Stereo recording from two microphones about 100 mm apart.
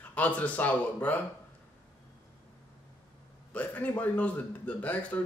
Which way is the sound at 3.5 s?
15° left (ahead or behind).